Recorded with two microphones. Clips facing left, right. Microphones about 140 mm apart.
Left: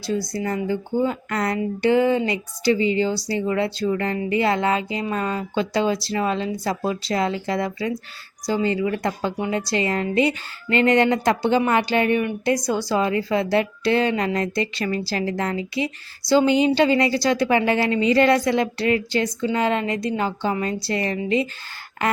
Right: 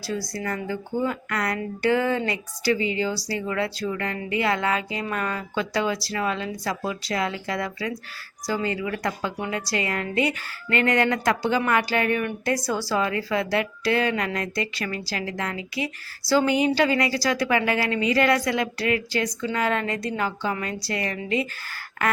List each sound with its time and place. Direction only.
0.0 s a woman's voice: 25° left (ahead or behind)